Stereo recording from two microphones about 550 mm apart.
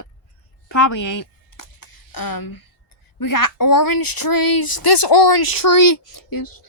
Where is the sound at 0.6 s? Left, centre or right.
Left.